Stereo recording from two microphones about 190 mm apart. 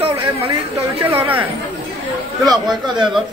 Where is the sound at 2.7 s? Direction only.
5° right (ahead or behind).